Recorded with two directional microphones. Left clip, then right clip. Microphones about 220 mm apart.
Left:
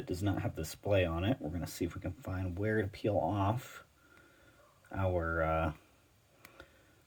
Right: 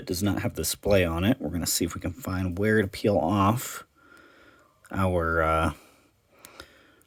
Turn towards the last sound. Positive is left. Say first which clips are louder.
# right 9 dB
turn(degrees=-50)  # may be behind; listen again after turning